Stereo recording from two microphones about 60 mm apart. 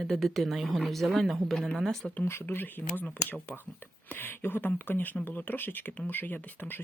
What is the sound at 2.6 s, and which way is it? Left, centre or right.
Speech, left.